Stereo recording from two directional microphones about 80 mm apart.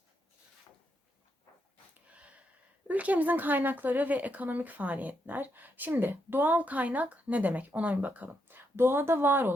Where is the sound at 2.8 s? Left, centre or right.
Centre.